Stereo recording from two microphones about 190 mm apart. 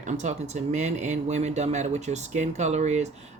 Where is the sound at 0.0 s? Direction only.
40° right (ahead or behind).